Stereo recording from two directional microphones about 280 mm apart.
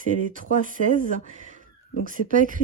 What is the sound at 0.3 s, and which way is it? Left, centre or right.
Speech, right.